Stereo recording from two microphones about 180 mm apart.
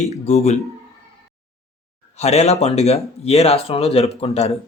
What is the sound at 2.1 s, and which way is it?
Speech, 35° left (ahead or behind).